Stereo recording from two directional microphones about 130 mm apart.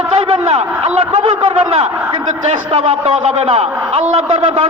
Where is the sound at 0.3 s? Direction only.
50° right (ahead or behind).